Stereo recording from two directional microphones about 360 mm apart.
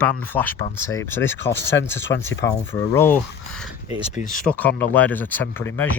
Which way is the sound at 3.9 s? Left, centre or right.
Left.